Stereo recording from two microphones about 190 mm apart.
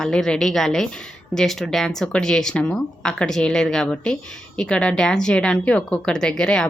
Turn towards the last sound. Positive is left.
turn(degrees=5)  # may be behind; listen again after turning